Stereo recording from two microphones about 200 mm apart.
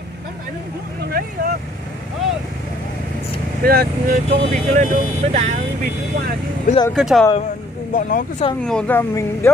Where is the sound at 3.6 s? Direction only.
50° right (ahead or behind).